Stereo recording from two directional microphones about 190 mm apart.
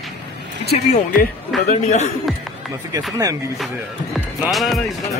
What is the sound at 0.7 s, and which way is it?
A man's voice, 35° left (ahead or behind).